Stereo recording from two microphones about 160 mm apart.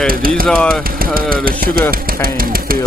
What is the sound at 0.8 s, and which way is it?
Speech, 65° right (ahead or behind).